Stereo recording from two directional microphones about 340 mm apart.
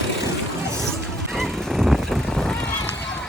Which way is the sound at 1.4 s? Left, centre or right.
Centre.